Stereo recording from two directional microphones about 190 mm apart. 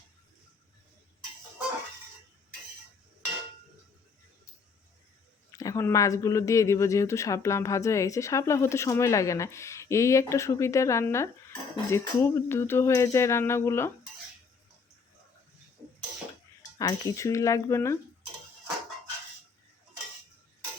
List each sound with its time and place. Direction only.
5.5 s speech: 15° left (ahead or behind)
16.7 s speech: 20° left (ahead or behind)